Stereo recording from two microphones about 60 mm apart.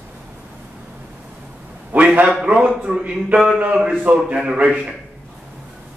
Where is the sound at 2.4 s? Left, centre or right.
Centre.